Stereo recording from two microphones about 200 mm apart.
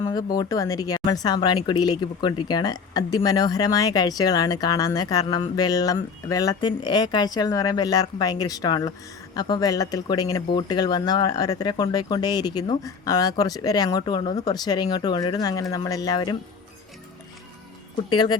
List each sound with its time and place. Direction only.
0.0 s a sound: 20° left (ahead or behind)
0.3 s speech: 15° left (ahead or behind)
18.1 s speech: 20° left (ahead or behind)